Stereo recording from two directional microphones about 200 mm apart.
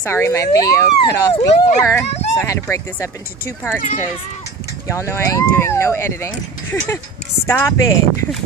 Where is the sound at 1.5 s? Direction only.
30° left (ahead or behind).